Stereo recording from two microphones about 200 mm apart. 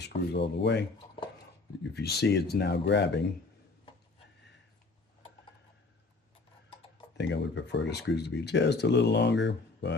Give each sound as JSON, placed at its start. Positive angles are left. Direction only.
{"t": 0.1, "sound": "speech", "side_deg": 30}
{"t": 0.6, "sound": "speech", "side_deg": 60}
{"t": 7.2, "sound": "speech", "side_deg": 60}